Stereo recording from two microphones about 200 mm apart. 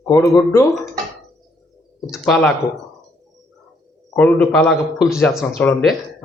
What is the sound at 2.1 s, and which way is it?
Speech, 5° left (ahead or behind).